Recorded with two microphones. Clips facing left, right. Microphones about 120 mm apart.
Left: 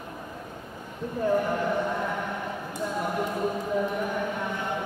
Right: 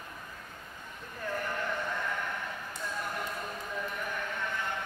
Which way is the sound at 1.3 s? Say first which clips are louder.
Left 9 dB; 20° left (ahead or behind).